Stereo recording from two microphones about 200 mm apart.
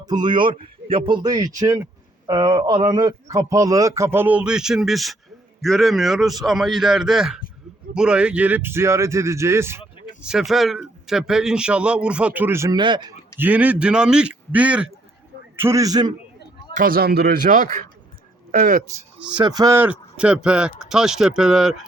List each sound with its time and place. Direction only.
0.0 s a man's voice: 20° right (ahead or behind)
13.4 s a man's voice: 5° right (ahead or behind)
16.7 s speech: 45° right (ahead or behind)
18.9 s speech: 5° right (ahead or behind)
19.4 s a man's voice: 20° right (ahead or behind); by 21.8 s centre (ahead or behind)